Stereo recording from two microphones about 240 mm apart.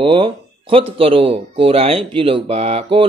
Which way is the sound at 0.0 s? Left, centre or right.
Right.